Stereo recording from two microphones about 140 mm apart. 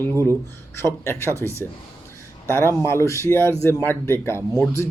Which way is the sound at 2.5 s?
15° left (ahead or behind).